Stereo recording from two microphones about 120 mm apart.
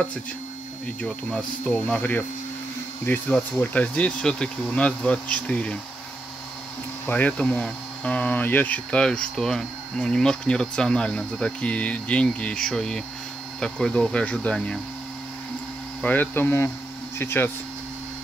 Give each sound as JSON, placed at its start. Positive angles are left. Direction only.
{"t": 1.0, "sound": "speech", "side_deg": 5}
{"t": 7.1, "sound": "speech", "side_deg": 10}
{"t": 16.0, "sound": "speech", "side_deg": 15}